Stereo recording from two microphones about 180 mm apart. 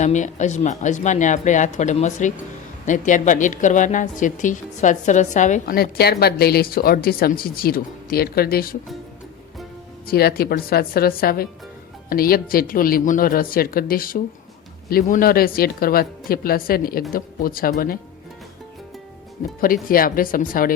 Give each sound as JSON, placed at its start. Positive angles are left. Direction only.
{"t": 0.0, "sound": "a woman's voice", "side_deg": 40}
{"t": 5.7, "sound": "speech", "side_deg": 60}
{"t": 10.1, "sound": "a woman's voice", "side_deg": 60}
{"t": 19.6, "sound": "a woman's voice", "side_deg": 50}